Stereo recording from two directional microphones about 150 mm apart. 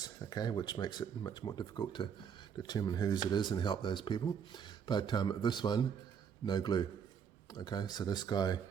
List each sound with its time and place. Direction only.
0.0 s speech: 25° left (ahead or behind)